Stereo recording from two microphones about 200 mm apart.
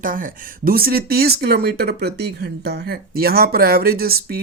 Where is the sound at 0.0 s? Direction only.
45° right (ahead or behind).